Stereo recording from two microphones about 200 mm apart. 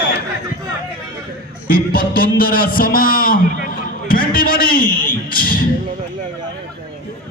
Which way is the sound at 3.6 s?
45° left (ahead or behind).